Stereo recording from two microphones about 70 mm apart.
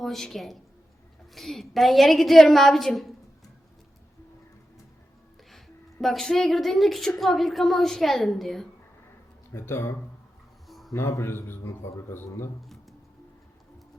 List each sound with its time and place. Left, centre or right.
0.0 s a woman's voice: centre
5.5 s a woman's voice: centre
9.5 s a man's voice: left
10.7 s a sound: centre
10.9 s a man's voice: left